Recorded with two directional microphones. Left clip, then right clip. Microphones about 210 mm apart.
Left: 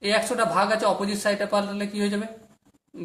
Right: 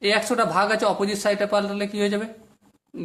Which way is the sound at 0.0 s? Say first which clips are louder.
Right 2 dB; 35° right (ahead or behind).